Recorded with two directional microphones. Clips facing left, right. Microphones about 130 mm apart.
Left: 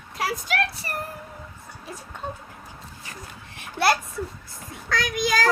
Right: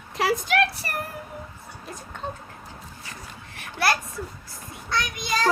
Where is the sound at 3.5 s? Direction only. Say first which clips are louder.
Left 3 dB; 25° left (ahead or behind).